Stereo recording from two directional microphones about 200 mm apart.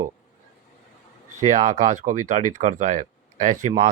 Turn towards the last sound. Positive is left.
turn(degrees=-40)  # may be behind; listen again after turning